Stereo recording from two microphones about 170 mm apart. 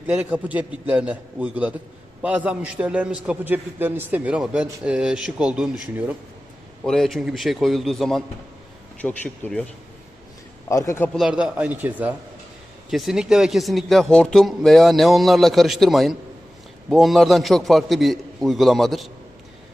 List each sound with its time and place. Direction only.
0.1 s a man's voice: 10° right (ahead or behind); by 9.6 s 10° left (ahead or behind)
10.7 s speech: 20° left (ahead or behind)
11.1 s a man's voice: 5° right (ahead or behind)